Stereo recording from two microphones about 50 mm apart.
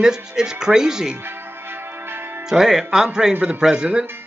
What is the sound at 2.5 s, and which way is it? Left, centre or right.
Speech, centre.